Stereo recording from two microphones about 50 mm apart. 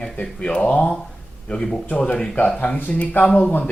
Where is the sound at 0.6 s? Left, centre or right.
Left.